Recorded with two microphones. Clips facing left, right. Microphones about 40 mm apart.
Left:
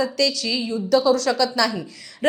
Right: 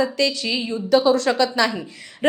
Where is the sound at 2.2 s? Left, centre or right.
Right.